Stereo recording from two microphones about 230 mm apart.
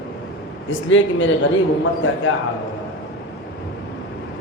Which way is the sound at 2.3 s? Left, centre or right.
Left.